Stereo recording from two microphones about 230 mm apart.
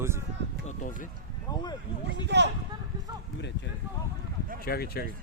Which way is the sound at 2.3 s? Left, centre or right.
Right.